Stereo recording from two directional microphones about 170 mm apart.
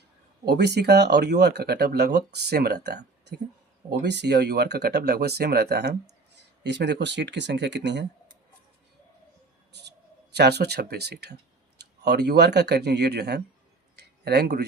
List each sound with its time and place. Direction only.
0.4 s speech: 75° right (ahead or behind)
6.6 s speech: 90° right
10.3 s speech: 75° right (ahead or behind)
13.9 s a sound: 75° right (ahead or behind)